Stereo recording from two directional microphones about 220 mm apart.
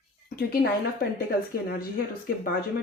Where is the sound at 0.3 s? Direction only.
45° left (ahead or behind).